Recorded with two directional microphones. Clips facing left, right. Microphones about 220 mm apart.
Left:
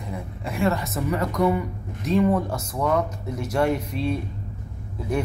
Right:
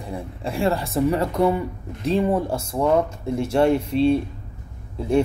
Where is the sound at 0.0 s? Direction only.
30° right (ahead or behind).